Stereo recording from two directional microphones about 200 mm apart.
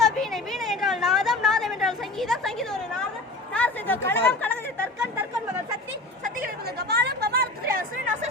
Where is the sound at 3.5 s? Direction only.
10° left (ahead or behind).